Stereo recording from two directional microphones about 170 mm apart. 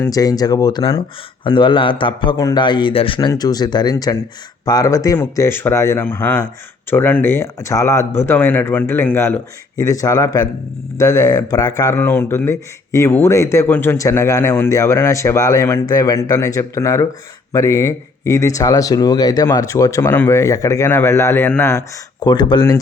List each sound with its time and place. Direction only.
0.0 s speech: 20° left (ahead or behind)